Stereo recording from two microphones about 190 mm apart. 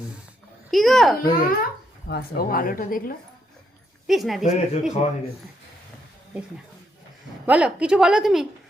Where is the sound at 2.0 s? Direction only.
55° left (ahead or behind).